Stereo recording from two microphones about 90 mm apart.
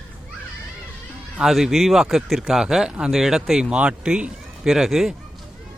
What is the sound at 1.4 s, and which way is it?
Speech, 5° right (ahead or behind).